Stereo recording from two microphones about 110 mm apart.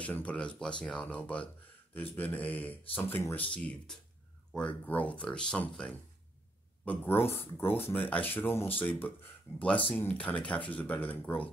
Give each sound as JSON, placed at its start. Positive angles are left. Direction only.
{"t": 0.0, "sound": "speech", "side_deg": 10}
{"t": 3.5, "sound": "speech", "side_deg": 10}